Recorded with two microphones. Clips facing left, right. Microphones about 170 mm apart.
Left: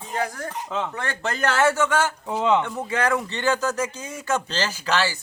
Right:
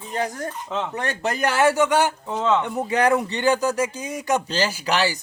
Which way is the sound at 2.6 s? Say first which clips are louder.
Right 4 dB; 15° right (ahead or behind).